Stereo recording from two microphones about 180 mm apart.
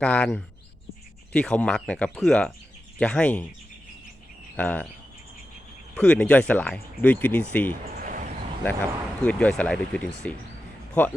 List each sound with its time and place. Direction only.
0.0 s speech: 5° left (ahead or behind)
4.5 s speech: 10° left (ahead or behind)
6.0 s speech: 5° left (ahead or behind)
7.9 s a sound: 50° right (ahead or behind)
8.6 s speech: 10° left (ahead or behind)